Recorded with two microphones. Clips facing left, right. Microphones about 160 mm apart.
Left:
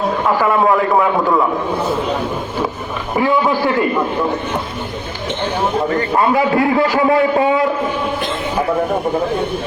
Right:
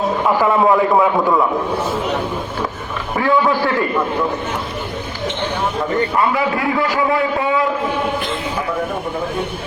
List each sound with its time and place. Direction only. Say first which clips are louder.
0.4 s a man's voice: right 1 dB; 10° right (ahead or behind)
3.2 s a man's voice: left 1 dB; 15° left (ahead or behind)
6.1 s a man's voice: left 8 dB; 30° left (ahead or behind)